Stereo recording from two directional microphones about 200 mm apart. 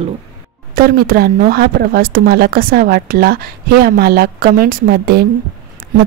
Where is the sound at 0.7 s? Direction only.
50° right (ahead or behind).